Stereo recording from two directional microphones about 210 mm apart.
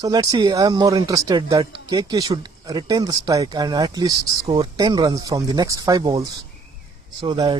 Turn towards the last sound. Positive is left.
turn(degrees=-20)  # may be behind; listen again after turning